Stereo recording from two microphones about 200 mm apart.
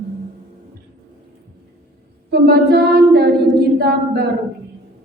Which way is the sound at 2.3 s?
55° right (ahead or behind).